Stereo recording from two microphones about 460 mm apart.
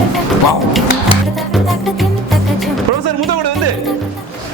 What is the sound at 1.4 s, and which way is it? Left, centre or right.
Music, centre.